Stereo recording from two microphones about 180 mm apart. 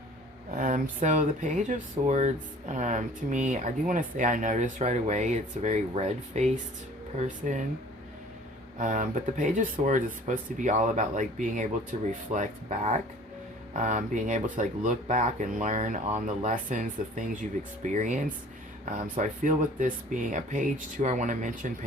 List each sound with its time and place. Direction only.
0.5 s speech: 45° right (ahead or behind)
8.8 s speech: 45° right (ahead or behind)